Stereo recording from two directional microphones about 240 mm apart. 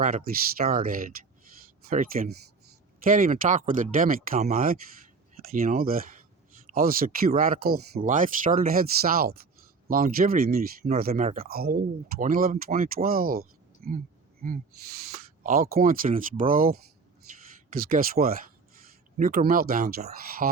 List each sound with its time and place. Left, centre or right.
0.0 s speech: right
14.4 s speech: right
17.8 s speech: right